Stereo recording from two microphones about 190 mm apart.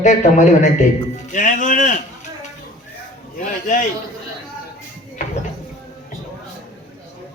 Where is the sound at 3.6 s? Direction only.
45° left (ahead or behind).